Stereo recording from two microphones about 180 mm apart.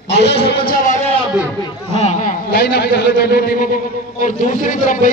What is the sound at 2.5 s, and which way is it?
A man's voice, 60° left (ahead or behind).